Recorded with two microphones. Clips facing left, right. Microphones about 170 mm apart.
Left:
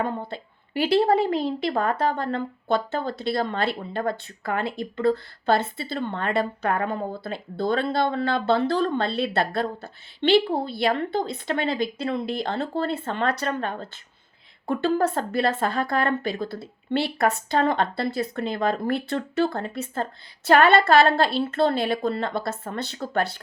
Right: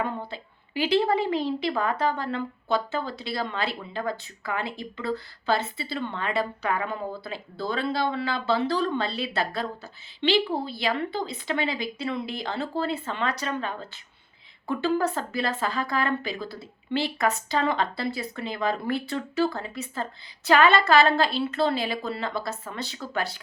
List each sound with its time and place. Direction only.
0.3 s a woman's voice: 55° left (ahead or behind)